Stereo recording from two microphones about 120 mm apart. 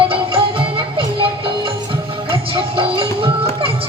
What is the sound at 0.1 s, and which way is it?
Music, 50° right (ahead or behind).